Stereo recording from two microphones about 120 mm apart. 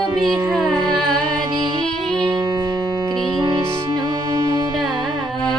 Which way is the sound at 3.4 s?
35° right (ahead or behind).